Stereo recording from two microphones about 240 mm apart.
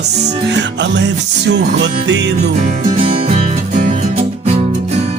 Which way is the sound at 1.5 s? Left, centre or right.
Right.